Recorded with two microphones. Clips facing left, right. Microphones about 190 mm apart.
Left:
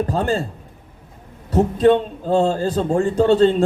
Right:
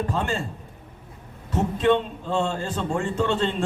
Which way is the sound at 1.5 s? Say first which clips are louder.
Left 6 dB; 40° left (ahead or behind).